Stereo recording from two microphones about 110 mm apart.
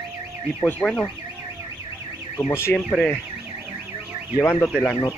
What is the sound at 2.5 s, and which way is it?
Speech, 25° left (ahead or behind).